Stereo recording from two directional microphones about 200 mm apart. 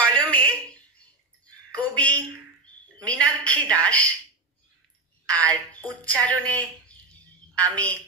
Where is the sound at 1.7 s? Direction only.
5° left (ahead or behind).